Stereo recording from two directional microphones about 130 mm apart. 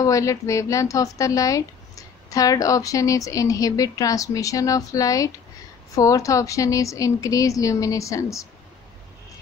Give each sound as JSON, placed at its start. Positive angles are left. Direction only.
{"t": 0.0, "sound": "a woman's voice", "side_deg": 25}